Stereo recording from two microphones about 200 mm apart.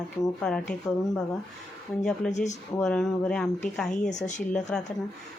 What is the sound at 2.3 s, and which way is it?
Speech, 35° left (ahead or behind).